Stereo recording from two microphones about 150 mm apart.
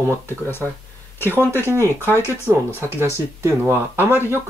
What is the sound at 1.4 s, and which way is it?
Speech, 15° left (ahead or behind).